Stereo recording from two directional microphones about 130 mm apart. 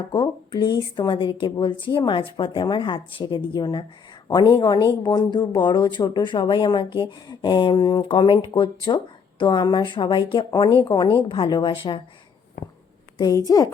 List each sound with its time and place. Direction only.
0.1 s speech: 35° left (ahead or behind)
12.6 s speech: 90° left
13.1 s a woman's voice: 30° left (ahead or behind)